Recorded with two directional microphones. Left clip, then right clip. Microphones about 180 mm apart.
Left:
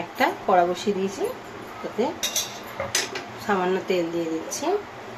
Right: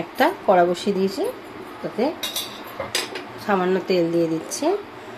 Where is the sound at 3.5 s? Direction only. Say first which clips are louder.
Right 3 dB; 40° right (ahead or behind).